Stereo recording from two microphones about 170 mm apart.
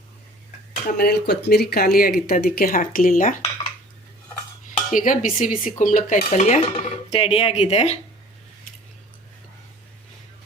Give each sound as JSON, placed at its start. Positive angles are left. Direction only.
{"t": 0.9, "sound": "speech", "side_deg": 65}
{"t": 1.7, "sound": "speech", "side_deg": 60}
{"t": 4.9, "sound": "dishes", "side_deg": 50}